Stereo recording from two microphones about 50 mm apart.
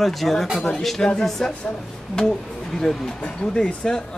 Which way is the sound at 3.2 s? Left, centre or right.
Left.